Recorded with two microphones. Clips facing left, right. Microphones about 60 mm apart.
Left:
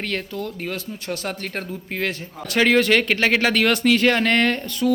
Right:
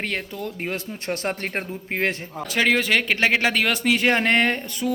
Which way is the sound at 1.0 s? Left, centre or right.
Right.